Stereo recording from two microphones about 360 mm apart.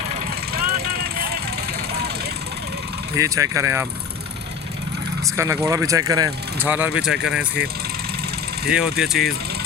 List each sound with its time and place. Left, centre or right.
0.5 s vehicle: right
3.2 s speech: centre
5.4 s speech: centre
8.7 s speech: centre